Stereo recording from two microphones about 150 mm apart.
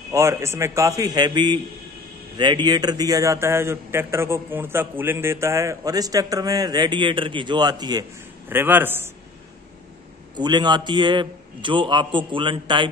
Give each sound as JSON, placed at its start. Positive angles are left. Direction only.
{"t": 0.1, "sound": "a man's voice", "side_deg": -20}
{"t": 8.5, "sound": "a man's voice", "side_deg": -15}
{"t": 10.3, "sound": "a man's voice", "side_deg": -30}